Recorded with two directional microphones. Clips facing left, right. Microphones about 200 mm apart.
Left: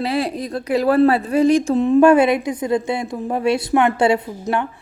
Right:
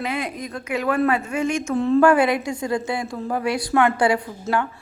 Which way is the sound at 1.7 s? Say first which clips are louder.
Left 1 dB; 20° left (ahead or behind).